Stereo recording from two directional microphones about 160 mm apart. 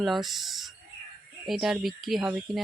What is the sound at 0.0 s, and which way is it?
Speech, centre (ahead or behind).